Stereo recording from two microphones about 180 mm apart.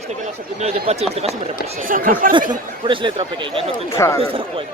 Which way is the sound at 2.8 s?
25° right (ahead or behind).